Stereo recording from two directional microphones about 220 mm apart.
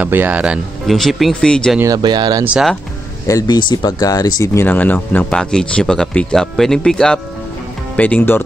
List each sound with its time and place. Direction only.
0.0 s speech: 10° right (ahead or behind)
1.8 s speech: 15° right (ahead or behind)
2.4 s speech: centre (ahead or behind)
3.3 s speech: 15° left (ahead or behind)